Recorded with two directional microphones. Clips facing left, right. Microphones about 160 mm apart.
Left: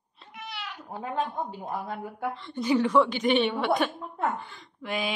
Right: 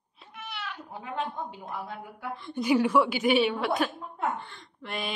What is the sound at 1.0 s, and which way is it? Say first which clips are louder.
A woman's voice: left 4 dB; 40° left (ahead or behind).